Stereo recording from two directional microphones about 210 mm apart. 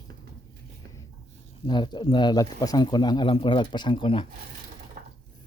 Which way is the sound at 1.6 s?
20° left (ahead or behind).